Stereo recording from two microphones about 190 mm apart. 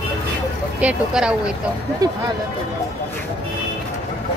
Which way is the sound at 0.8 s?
5° right (ahead or behind).